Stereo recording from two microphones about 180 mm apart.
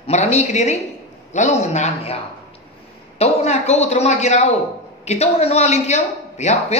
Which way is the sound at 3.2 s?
35° left (ahead or behind).